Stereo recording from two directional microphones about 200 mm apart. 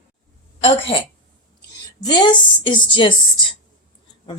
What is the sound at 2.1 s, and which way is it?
A woman's voice, 20° left (ahead or behind).